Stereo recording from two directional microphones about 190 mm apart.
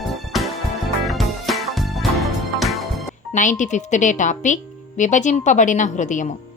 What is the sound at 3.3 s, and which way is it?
Speech, 40° left (ahead or behind).